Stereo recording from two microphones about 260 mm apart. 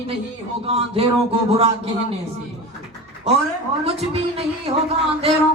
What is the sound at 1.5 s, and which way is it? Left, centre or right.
Speech, right.